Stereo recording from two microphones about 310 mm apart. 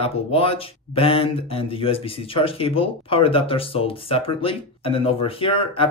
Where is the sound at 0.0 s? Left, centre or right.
Centre.